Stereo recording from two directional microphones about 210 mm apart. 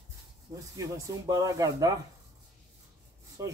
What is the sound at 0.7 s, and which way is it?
Speech, 15° right (ahead or behind).